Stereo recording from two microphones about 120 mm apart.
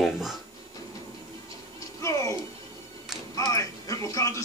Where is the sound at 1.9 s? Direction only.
25° left (ahead or behind).